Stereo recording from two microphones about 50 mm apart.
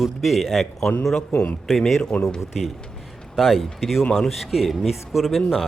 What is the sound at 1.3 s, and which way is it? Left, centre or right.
Speech, left.